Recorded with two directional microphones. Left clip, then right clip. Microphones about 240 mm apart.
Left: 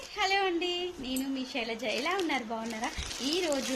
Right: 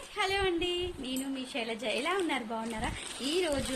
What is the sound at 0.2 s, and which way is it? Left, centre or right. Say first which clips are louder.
A woman's voice: left 2 dB; centre.